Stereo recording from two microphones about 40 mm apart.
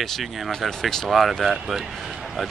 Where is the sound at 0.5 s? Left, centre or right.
Centre.